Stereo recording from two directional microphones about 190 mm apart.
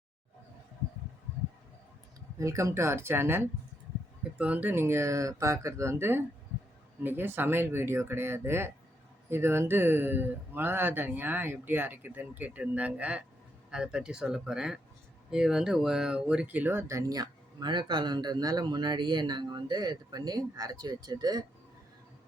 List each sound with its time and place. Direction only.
2.4 s speech: 15° right (ahead or behind)